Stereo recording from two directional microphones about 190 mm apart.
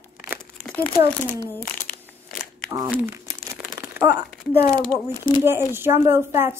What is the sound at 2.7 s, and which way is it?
Speech, 10° right (ahead or behind).